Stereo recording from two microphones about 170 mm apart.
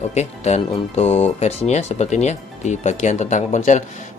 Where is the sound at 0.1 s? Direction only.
40° left (ahead or behind).